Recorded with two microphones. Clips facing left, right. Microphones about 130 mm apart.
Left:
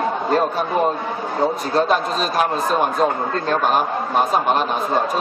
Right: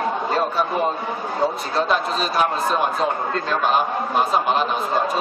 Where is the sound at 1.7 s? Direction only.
45° left (ahead or behind).